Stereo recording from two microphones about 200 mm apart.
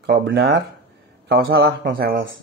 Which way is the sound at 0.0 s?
55° right (ahead or behind).